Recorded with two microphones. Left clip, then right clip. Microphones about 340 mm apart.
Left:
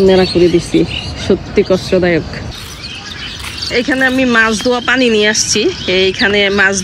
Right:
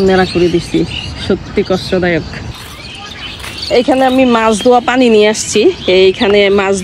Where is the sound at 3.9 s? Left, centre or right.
Right.